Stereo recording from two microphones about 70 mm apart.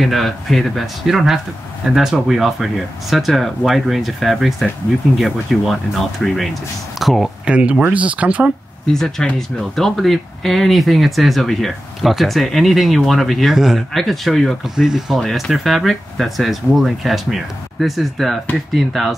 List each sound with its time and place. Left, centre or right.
0.0 s speech: centre
7.4 s speech: centre
8.8 s speech: centre
15.1 s speech: centre